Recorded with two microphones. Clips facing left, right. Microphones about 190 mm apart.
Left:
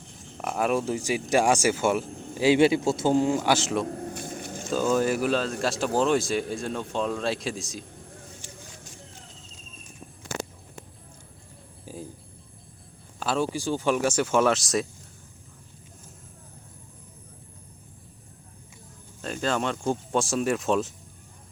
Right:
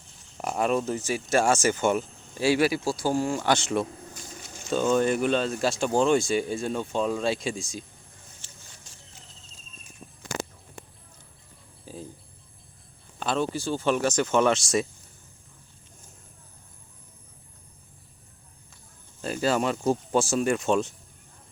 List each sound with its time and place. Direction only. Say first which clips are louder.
0.4 s speech: even; 5° left (ahead or behind)
2.4 s a man's voice: left 3 dB; 20° left (ahead or behind)
3.5 s speech: even; centre (ahead or behind)
3.8 s a sound: left 10 dB; 60° left (ahead or behind)
4.7 s speech: right 1 dB; 5° left (ahead or behind)
11.9 s music: left 1 dB; 10° left (ahead or behind)
13.1 s speech: even; 5° left (ahead or behind)
19.2 s speech: right 2 dB; 5° right (ahead or behind)